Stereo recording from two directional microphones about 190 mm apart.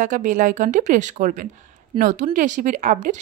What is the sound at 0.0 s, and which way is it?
Speech, 45° right (ahead or behind).